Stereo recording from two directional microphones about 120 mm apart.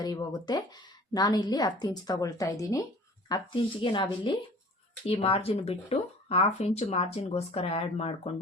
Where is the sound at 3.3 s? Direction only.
40° left (ahead or behind).